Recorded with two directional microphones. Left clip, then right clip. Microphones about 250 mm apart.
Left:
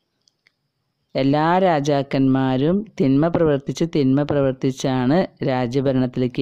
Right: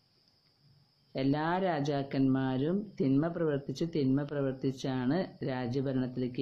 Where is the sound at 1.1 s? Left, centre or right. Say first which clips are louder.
Left 14 dB; left.